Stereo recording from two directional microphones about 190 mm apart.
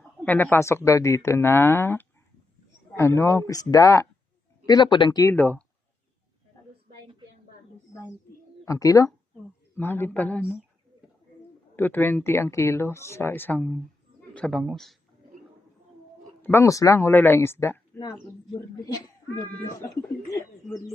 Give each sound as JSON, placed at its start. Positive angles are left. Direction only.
{"t": 0.3, "sound": "speech", "side_deg": 10}
{"t": 8.6, "sound": "speech", "side_deg": 15}
{"t": 11.8, "sound": "speech", "side_deg": 10}
{"t": 16.4, "sound": "speech", "side_deg": 10}